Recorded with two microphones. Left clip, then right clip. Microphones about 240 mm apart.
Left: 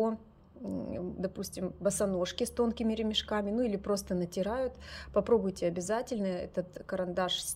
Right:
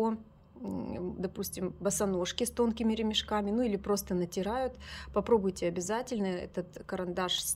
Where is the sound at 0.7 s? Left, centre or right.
Centre.